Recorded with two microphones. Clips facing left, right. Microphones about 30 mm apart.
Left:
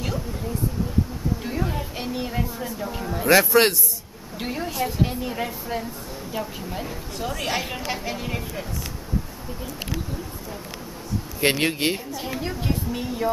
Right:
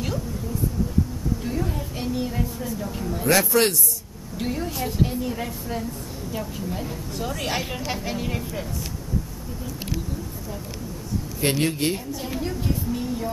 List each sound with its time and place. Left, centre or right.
1.4 s speech: centre
4.7 s speech: centre
5.0 s speech: centre
11.4 s a woman's voice: left